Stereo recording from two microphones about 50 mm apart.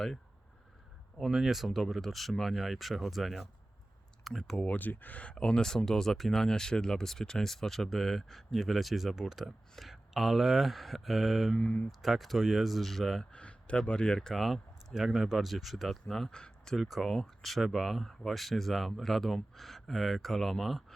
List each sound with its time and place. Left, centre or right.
1.2 s speech: centre
4.6 s speech: left
5.3 s speech: centre
11.6 s speech: left
11.9 s speech: centre
13.3 s speech: left
14.2 s speech: centre
16.7 s speech: centre